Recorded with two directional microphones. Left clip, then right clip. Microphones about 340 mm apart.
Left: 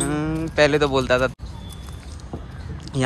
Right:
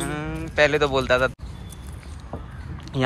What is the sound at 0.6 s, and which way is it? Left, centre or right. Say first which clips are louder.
Speech: left 1 dB; centre.